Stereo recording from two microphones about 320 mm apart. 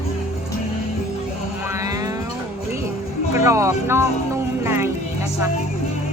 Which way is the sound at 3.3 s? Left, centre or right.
Centre.